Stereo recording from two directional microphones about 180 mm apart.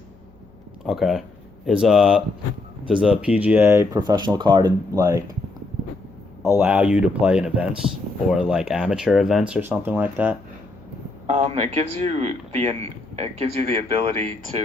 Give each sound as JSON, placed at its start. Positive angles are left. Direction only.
{"t": 0.9, "sound": "speech", "side_deg": 0}
{"t": 6.4, "sound": "speech", "side_deg": -10}
{"t": 11.3, "sound": "speech", "side_deg": -35}